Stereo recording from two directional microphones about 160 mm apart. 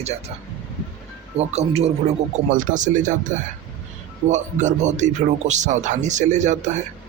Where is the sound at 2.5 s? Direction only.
55° right (ahead or behind).